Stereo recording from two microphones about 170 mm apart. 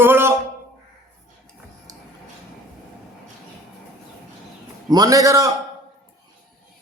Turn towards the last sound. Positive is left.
turn(degrees=-20)  # may be behind; listen again after turning